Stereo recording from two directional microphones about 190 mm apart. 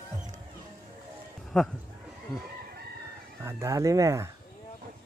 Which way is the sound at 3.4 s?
15° right (ahead or behind).